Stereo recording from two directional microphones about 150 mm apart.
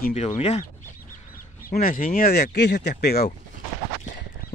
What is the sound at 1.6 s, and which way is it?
Speech, 70° left (ahead or behind).